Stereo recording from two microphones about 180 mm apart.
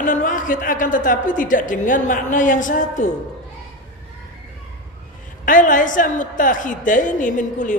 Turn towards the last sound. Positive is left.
turn(degrees=45)  # may be behind; listen again after turning